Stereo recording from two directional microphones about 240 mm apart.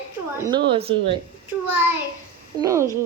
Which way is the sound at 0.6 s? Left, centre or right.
Right.